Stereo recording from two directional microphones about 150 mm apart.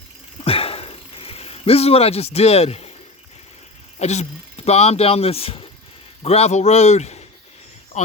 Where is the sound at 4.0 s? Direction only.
45° left (ahead or behind).